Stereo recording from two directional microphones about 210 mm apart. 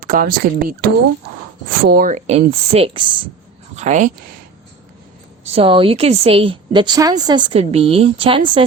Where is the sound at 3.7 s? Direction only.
35° right (ahead or behind).